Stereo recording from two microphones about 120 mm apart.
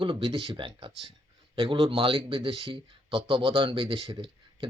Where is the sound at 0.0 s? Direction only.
45° right (ahead or behind).